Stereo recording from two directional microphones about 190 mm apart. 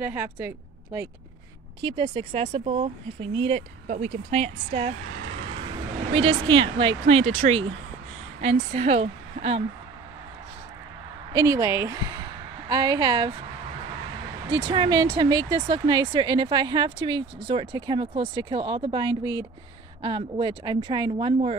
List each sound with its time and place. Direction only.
0.0 s speech: 10° right (ahead or behind)
1.8 s a woman's voice: 25° right (ahead or behind)
11.3 s speech: 15° right (ahead or behind)
14.5 s speech: 25° right (ahead or behind)